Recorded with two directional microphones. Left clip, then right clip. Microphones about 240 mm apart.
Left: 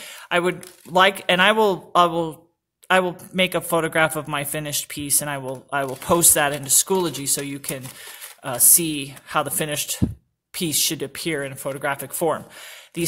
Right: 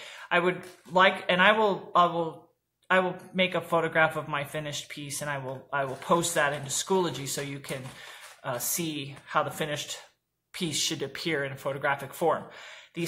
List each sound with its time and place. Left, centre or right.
0.0 s a man's voice: left